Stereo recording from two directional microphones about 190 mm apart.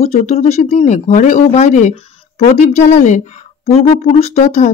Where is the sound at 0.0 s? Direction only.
35° left (ahead or behind).